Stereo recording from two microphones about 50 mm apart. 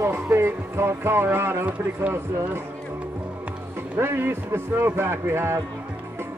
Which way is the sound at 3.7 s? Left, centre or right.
Right.